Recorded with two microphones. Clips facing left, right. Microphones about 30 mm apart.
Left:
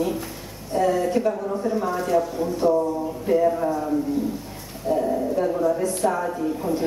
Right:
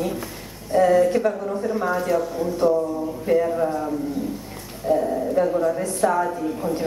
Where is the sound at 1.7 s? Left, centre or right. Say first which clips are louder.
Right 1 dB; centre.